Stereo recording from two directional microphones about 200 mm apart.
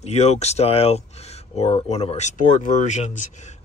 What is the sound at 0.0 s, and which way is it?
Speech, 35° left (ahead or behind).